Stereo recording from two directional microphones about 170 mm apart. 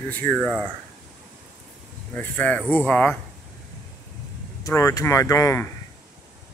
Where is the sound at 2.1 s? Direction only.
10° left (ahead or behind).